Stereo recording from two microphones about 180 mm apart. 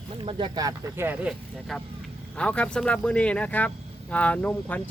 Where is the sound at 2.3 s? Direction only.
5° left (ahead or behind).